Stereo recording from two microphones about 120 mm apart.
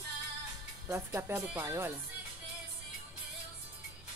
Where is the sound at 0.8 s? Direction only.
20° right (ahead or behind).